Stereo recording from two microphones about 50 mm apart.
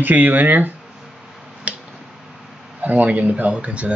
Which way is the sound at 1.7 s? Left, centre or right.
Right.